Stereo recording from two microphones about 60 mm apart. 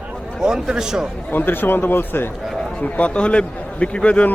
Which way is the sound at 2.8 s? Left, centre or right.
Left.